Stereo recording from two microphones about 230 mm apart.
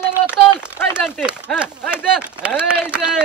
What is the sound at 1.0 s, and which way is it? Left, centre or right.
Speech, centre.